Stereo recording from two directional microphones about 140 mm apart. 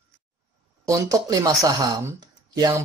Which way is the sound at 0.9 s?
25° right (ahead or behind).